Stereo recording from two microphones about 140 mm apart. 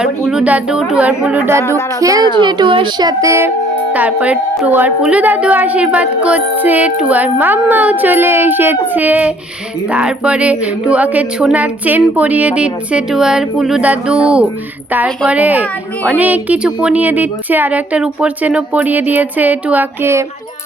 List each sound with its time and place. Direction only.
0.0 s speech: 5° right (ahead or behind)
1.7 s a woman's voice: 25° right (ahead or behind)
3.9 s speech: 10° right (ahead or behind)